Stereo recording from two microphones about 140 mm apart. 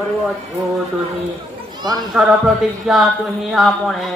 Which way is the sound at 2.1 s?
Centre (ahead or behind).